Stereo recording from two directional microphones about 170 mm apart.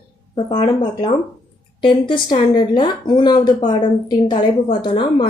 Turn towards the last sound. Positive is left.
turn(degrees=35)  # may be behind; listen again after turning